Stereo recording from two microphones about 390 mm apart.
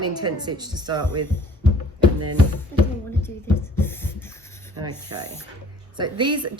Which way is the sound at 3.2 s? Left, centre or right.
Centre.